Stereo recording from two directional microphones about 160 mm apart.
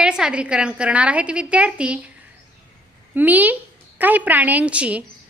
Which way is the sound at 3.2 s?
10° right (ahead or behind).